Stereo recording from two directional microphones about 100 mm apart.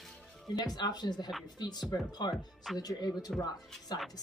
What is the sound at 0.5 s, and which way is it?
Speech, 45° left (ahead or behind).